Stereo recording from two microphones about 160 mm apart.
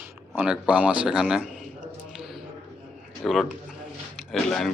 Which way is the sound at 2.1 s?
Centre (ahead or behind).